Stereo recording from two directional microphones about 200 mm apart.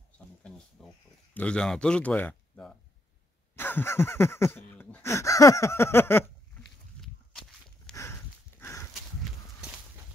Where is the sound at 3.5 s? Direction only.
10° left (ahead or behind).